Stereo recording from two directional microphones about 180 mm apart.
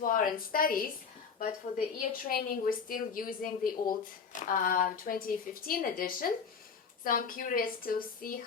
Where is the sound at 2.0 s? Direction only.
55° left (ahead or behind).